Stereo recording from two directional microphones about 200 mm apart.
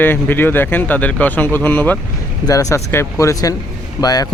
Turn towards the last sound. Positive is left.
turn(degrees=20)  # may be behind; listen again after turning